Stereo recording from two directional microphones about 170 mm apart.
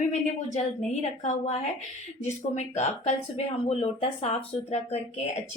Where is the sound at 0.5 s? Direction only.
40° left (ahead or behind).